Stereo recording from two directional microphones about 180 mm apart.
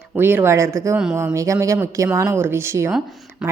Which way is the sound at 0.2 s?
10° right (ahead or behind).